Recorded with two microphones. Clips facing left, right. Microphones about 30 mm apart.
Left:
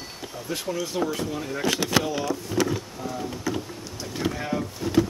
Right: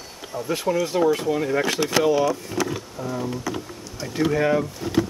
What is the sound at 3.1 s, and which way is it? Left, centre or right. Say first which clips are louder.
Speech: right 3 dB; centre.